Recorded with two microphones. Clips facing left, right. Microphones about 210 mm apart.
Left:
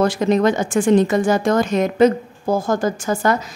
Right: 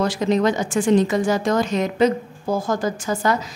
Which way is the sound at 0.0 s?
55° left (ahead or behind).